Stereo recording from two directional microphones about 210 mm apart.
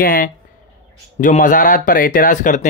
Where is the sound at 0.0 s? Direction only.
40° left (ahead or behind).